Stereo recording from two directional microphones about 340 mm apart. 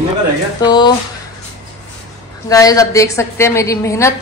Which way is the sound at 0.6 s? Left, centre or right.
Centre.